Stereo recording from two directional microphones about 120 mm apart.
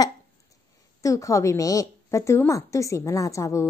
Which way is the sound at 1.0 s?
25° left (ahead or behind).